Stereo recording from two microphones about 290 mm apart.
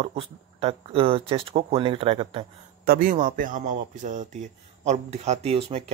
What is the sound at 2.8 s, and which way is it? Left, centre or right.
Speech, right.